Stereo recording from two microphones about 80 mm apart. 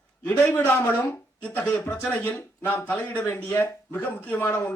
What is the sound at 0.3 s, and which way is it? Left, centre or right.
Speech, left.